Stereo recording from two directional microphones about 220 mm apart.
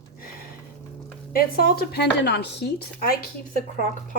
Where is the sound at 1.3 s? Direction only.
45° left (ahead or behind).